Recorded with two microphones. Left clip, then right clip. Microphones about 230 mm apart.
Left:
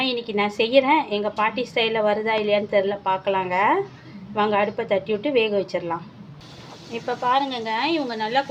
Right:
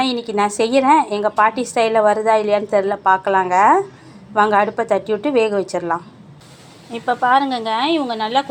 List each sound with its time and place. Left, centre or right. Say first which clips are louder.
0.3 s a woman's voice: right 5 dB; right